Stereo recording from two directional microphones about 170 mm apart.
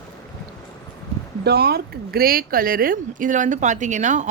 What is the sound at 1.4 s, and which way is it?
Speech, 70° right (ahead or behind).